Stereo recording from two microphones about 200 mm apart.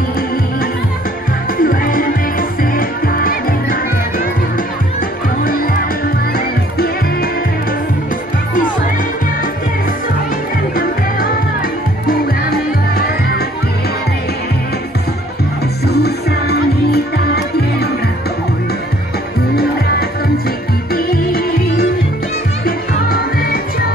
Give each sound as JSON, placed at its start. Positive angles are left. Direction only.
{"t": 1.6, "sound": "music", "side_deg": 45}
{"t": 5.4, "sound": "music", "side_deg": 45}
{"t": 10.8, "sound": "music", "side_deg": 45}
{"t": 15.9, "sound": "music", "side_deg": 55}
{"t": 20.9, "sound": "music", "side_deg": 45}